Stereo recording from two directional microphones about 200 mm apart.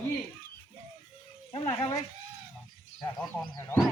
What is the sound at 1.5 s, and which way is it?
Speech, 25° left (ahead or behind).